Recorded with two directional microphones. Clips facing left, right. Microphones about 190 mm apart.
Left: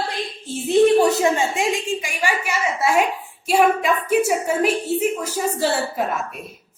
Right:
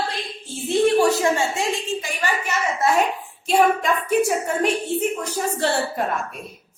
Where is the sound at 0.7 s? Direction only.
20° left (ahead or behind).